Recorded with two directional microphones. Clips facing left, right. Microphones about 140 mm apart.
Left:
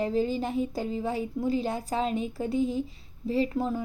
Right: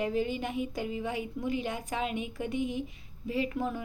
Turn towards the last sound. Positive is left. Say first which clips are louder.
# left 4 dB
turn(degrees=30)  # may be behind; listen again after turning